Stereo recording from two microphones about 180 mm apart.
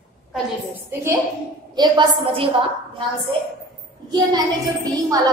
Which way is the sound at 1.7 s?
25° right (ahead or behind).